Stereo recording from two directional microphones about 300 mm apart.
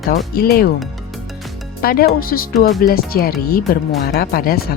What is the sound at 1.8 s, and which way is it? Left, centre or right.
Speech, left.